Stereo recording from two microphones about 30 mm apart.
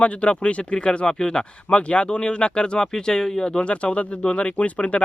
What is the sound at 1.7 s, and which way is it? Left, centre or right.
Speech, left.